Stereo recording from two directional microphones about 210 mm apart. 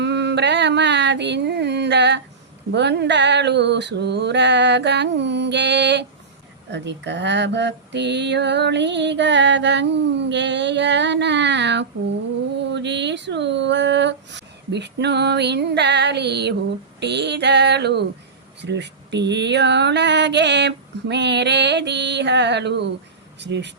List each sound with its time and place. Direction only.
0.0 s a sound: 55° right (ahead or behind)
2.7 s speech: 55° right (ahead or behind)
17.0 s female singing: 55° right (ahead or behind)
18.6 s speech: 55° right (ahead or behind)